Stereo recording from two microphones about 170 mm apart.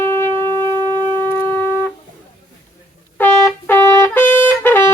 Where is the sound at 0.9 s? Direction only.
25° right (ahead or behind).